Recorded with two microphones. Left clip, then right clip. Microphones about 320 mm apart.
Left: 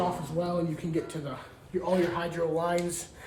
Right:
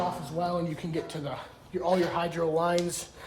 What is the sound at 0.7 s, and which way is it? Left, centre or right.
Speech, right.